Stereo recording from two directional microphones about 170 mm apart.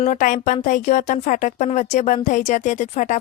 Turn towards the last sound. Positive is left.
turn(degrees=45)  # may be behind; listen again after turning